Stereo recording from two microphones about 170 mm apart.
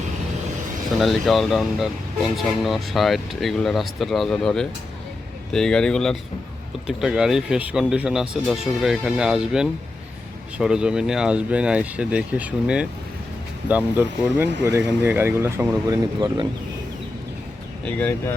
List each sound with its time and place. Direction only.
0.9 s speech: centre (ahead or behind); by 16.5 s 20° right (ahead or behind)